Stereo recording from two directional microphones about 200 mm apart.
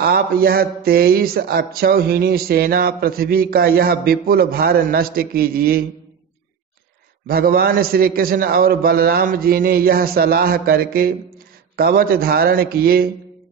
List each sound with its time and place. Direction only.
0.0 s speech: 50° right (ahead or behind)
7.2 s speech: 50° right (ahead or behind)